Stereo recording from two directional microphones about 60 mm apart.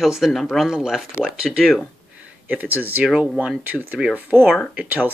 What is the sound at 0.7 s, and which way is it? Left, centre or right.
Speech, centre.